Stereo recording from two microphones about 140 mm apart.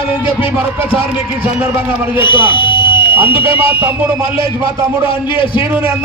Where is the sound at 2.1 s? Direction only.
35° left (ahead or behind).